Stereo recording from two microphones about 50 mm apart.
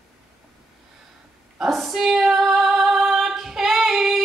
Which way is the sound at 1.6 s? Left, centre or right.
Centre.